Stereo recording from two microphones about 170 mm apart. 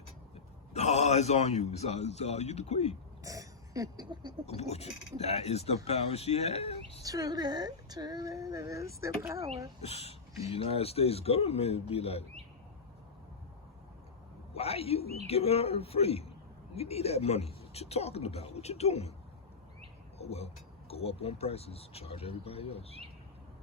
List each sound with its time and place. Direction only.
0.3 s a man's voice: 40° left (ahead or behind)
3.2 s cough: 20° right (ahead or behind)
4.4 s speech: 40° left (ahead or behind)
7.0 s speech: 20° right (ahead or behind)
9.8 s speech: 35° left (ahead or behind)
14.5 s speech: 35° left (ahead or behind)
20.1 s speech: 35° left (ahead or behind)